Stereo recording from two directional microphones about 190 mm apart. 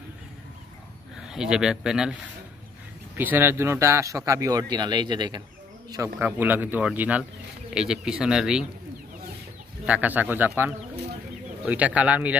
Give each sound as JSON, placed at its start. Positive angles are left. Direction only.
{"t": 1.2, "sound": "speech", "side_deg": -5}
{"t": 3.2, "sound": "a man's voice", "side_deg": -10}
{"t": 9.8, "sound": "a man's voice", "side_deg": -10}